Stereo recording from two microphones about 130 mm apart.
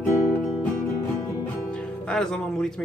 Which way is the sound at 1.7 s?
5° left (ahead or behind).